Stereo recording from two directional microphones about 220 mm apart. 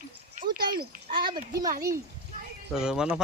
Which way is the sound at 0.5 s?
40° right (ahead or behind).